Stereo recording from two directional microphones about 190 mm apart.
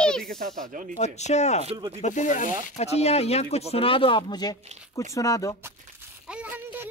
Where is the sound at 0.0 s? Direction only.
5° left (ahead or behind).